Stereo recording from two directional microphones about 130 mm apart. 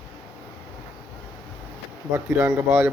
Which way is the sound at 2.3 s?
20° right (ahead or behind).